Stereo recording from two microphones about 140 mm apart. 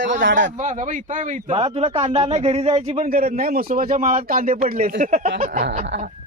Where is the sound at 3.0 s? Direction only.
90° right; by 5.3 s 70° right (ahead or behind).